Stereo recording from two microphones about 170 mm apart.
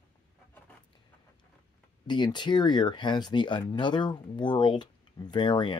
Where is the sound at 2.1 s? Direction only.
25° left (ahead or behind).